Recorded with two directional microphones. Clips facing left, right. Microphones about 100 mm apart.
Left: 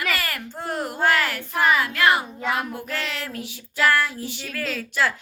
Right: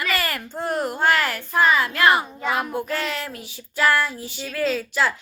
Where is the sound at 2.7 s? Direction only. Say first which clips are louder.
Right 5 dB; 20° right (ahead or behind).